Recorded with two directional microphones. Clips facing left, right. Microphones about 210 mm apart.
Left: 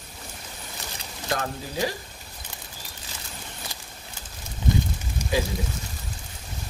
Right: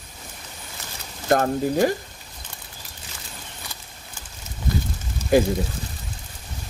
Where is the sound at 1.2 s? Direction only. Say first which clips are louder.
Right 10 dB; 50° right (ahead or behind).